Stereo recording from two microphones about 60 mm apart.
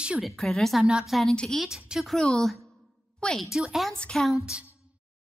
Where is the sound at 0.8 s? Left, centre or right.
Centre.